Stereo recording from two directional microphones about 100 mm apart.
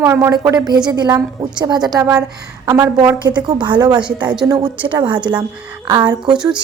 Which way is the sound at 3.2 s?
50° right (ahead or behind).